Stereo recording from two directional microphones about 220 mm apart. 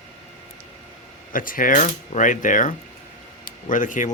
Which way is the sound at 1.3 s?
40° left (ahead or behind).